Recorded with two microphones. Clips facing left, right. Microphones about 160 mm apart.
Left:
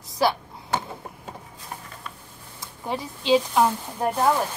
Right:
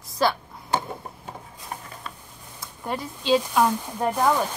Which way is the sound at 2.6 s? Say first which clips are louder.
Even; 15° left (ahead or behind).